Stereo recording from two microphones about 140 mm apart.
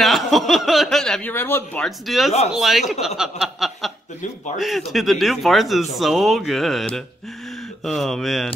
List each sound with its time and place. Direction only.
0.0 s speech: centre (ahead or behind)
1.3 s speech: 15° left (ahead or behind)
1.9 s a man's voice: centre (ahead or behind)